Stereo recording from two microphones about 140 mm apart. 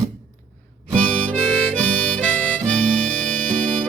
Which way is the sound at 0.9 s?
5° left (ahead or behind).